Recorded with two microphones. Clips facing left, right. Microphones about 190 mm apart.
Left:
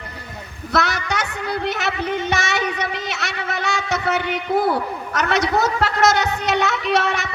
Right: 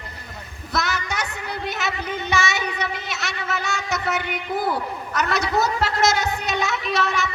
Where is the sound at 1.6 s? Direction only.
65° left (ahead or behind).